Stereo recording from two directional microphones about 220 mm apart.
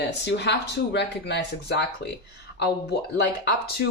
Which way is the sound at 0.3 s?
50° left (ahead or behind).